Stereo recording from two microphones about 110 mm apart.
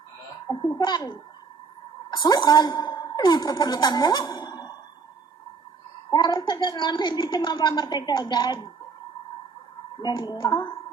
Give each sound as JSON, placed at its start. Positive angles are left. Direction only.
{"t": 0.8, "sound": "a woman's voice", "side_deg": 40}
{"t": 6.1, "sound": "a woman's voice", "side_deg": 40}
{"t": 10.0, "sound": "a woman's voice", "side_deg": 40}